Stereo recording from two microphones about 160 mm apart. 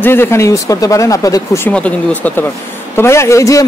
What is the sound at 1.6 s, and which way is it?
A man's voice, 10° left (ahead or behind).